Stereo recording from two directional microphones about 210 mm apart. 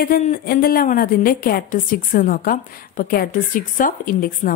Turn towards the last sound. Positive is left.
turn(degrees=40)  # may be behind; listen again after turning